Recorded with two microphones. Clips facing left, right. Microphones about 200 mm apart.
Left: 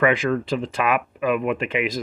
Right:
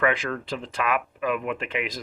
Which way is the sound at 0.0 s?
10° left (ahead or behind).